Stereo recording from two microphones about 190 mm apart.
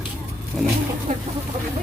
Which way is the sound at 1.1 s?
40° right (ahead or behind).